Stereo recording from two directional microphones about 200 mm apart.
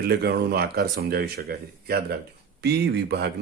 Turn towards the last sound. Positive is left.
turn(degrees=-55)  # may be behind; listen again after turning